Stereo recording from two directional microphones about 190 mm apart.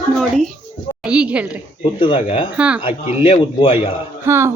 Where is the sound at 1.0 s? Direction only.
5° right (ahead or behind).